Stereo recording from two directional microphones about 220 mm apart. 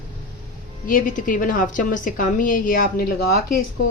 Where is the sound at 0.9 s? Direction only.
40° left (ahead or behind).